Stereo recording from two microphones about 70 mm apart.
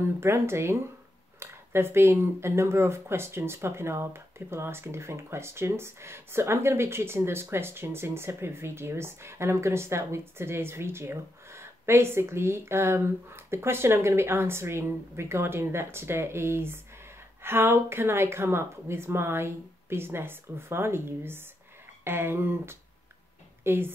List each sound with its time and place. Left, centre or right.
0.0 s a woman's voice: right